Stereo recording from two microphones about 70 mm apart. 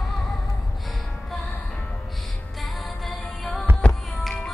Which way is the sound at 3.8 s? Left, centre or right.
Centre.